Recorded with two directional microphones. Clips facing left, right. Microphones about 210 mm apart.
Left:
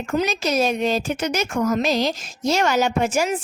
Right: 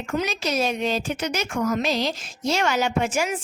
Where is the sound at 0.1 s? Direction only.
45° left (ahead or behind).